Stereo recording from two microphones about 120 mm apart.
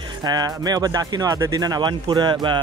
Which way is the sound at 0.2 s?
35° right (ahead or behind).